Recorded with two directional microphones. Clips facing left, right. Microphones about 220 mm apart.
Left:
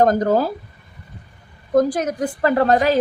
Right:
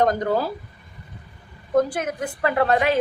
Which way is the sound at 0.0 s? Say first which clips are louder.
Left 5 dB; 45° left (ahead or behind).